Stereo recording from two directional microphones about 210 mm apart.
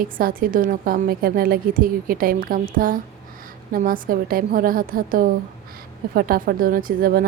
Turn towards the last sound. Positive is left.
turn(degrees=-45)  # may be behind; listen again after turning